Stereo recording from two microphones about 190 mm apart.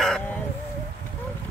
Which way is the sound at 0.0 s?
5° left (ahead or behind).